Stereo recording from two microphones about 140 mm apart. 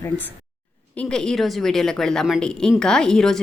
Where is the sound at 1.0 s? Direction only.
5° left (ahead or behind).